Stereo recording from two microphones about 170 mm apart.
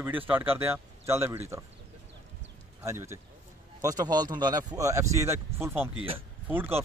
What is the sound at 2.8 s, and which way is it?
A man's voice, 15° right (ahead or behind).